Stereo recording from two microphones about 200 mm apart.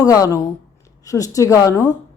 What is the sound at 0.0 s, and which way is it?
Speech, 20° left (ahead or behind).